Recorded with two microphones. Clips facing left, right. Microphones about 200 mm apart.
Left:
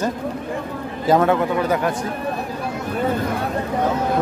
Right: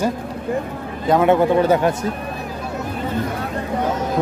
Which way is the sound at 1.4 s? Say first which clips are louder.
Right 5 dB; 30° right (ahead or behind).